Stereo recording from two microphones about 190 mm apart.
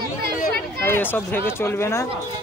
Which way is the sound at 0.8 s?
10° left (ahead or behind).